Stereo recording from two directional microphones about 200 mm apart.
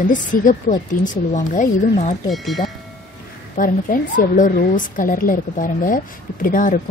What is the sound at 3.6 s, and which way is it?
Speech, 40° left (ahead or behind).